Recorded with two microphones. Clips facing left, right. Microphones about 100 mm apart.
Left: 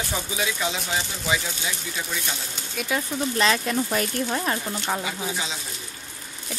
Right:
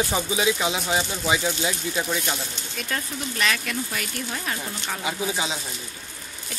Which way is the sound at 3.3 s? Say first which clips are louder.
Left 4 dB; 30° left (ahead or behind).